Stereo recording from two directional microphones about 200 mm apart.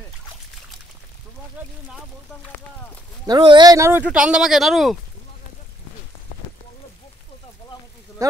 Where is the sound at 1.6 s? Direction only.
10° right (ahead or behind).